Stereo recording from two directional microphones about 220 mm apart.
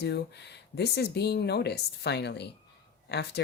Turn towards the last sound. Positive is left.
turn(degrees=50)  # may be behind; listen again after turning